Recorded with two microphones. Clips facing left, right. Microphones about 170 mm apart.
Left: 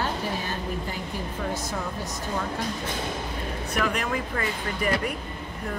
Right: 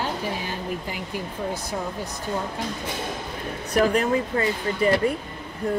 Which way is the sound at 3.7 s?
30° right (ahead or behind).